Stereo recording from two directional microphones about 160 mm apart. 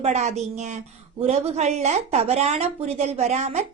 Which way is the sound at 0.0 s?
45° right (ahead or behind).